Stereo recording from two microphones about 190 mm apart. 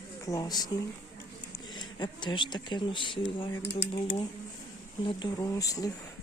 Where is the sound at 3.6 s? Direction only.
65° left (ahead or behind).